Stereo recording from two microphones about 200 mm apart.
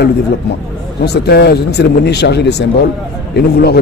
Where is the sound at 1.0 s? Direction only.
55° left (ahead or behind).